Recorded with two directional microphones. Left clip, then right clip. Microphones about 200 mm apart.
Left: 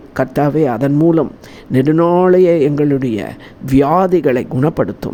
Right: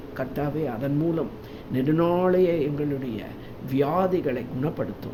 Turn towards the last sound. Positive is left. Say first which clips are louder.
# left 13 dB
turn(degrees=45)  # may be behind; listen again after turning